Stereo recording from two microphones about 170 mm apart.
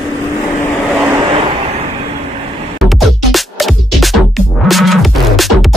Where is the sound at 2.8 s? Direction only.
Centre (ahead or behind).